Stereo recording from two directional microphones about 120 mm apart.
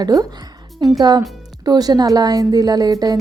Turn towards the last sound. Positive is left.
turn(degrees=-30)  # may be behind; listen again after turning